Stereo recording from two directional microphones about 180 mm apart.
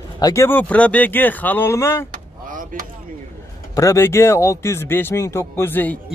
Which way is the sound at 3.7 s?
15° left (ahead or behind).